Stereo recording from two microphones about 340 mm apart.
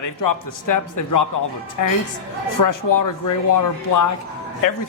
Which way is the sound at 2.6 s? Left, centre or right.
Left.